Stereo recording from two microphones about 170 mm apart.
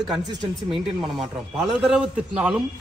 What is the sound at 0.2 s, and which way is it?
Speech, 25° right (ahead or behind).